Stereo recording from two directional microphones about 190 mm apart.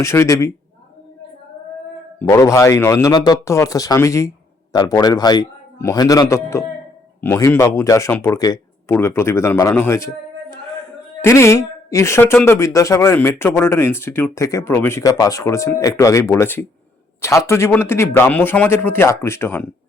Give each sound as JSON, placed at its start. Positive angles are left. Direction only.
{"t": 0.0, "sound": "speech", "side_deg": 15}
{"t": 2.1, "sound": "a man's voice", "side_deg": 15}
{"t": 11.2, "sound": "speech", "side_deg": 15}